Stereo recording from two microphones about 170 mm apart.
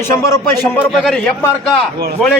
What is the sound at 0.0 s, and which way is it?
Speech, 15° left (ahead or behind).